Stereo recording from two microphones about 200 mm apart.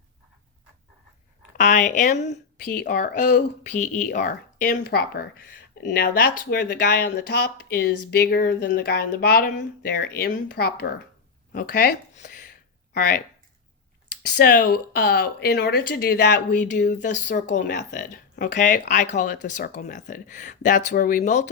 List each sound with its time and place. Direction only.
1.5 s speech: 40° left (ahead or behind)
2.9 s speech: 55° left (ahead or behind)
3.6 s speech: 35° left (ahead or behind)
4.1 s speech: 50° left (ahead or behind)
12.1 s a sound: 40° left (ahead or behind)
12.9 s speech: 55° left (ahead or behind)
14.2 s speech: 50° left (ahead or behind)
16.6 s speech: 40° left (ahead or behind)